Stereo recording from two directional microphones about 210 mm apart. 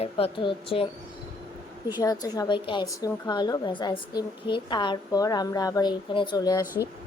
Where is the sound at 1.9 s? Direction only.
15° left (ahead or behind).